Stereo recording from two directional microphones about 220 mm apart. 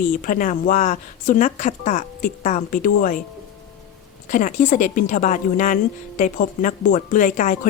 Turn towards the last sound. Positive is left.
turn(degrees=35)  # may be behind; listen again after turning